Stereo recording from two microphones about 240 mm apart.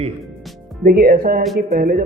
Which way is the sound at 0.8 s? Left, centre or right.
Right.